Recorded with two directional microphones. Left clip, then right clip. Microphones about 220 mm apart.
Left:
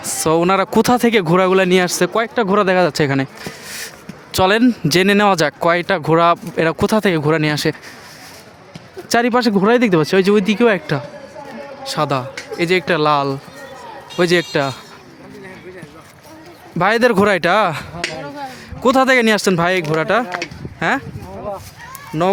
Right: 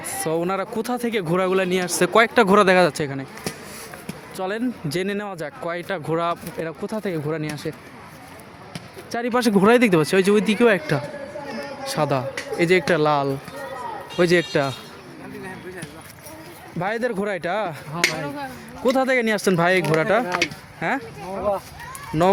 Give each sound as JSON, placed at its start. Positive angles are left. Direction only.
{"t": 0.2, "sound": "speech", "side_deg": 35}
{"t": 2.1, "sound": "speech", "side_deg": 0}
{"t": 3.0, "sound": "speech", "side_deg": 30}
{"t": 4.4, "sound": "speech", "side_deg": 40}
{"t": 9.0, "sound": "speech", "side_deg": 35}
{"t": 9.3, "sound": "speech", "side_deg": 15}
{"t": 16.7, "sound": "speech", "side_deg": 40}
{"t": 20.7, "sound": "speech", "side_deg": 30}
{"t": 22.1, "sound": "speech", "side_deg": 10}